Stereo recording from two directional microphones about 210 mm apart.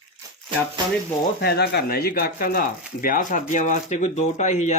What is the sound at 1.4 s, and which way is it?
Speech, 50° left (ahead or behind).